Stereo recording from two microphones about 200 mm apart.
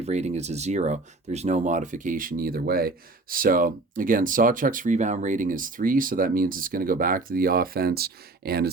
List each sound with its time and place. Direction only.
0.0 s speech: 35° right (ahead or behind); by 8.7 s 50° right (ahead or behind)